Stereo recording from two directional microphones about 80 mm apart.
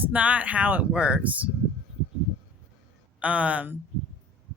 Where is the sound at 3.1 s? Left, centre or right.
Centre.